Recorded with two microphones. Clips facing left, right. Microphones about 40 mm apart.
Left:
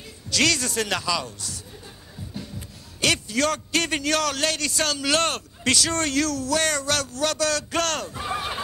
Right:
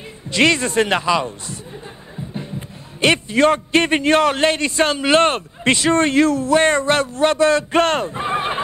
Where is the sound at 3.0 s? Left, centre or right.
Right.